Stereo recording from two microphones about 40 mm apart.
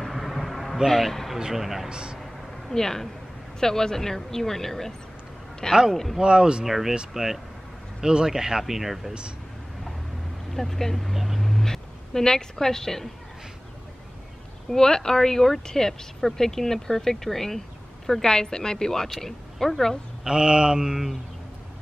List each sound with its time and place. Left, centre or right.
0.0 s a sound: centre
0.8 s a woman's voice: centre
1.4 s speech: centre
1.9 s mantra: right
2.7 s a woman's voice: centre
6.2 s mantra: right
6.6 s speech: centre
10.5 s a woman's voice: centre
14.7 s a woman's voice: centre
20.2 s mantra: centre